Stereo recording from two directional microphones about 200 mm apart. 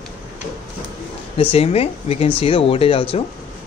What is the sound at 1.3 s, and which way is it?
Speech, 30° left (ahead or behind).